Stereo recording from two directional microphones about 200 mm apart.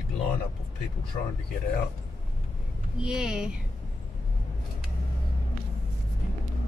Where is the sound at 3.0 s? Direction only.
5° right (ahead or behind).